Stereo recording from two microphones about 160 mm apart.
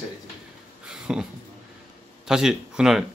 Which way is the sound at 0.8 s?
5° right (ahead or behind).